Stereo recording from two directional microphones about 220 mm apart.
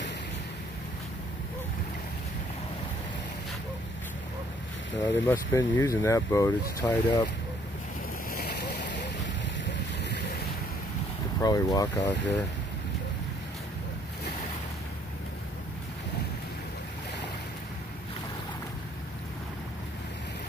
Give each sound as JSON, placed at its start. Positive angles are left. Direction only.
{"t": 5.0, "sound": "speech", "side_deg": 10}
{"t": 8.3, "sound": "boat", "side_deg": 45}
{"t": 11.3, "sound": "speech", "side_deg": 15}